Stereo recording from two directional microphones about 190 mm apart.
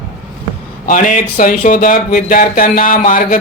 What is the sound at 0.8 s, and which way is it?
Speech, 40° left (ahead or behind).